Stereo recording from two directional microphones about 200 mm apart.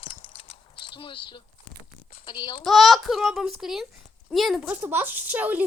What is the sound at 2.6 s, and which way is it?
A child's voice, centre (ahead or behind).